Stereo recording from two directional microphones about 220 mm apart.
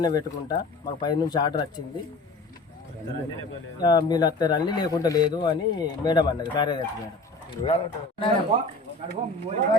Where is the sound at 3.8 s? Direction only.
20° left (ahead or behind).